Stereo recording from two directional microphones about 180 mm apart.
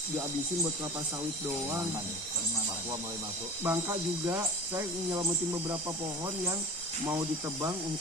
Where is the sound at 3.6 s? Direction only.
15° right (ahead or behind).